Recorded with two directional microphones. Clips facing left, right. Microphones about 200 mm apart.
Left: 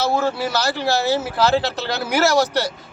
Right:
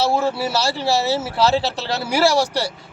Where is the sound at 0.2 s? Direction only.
30° right (ahead or behind).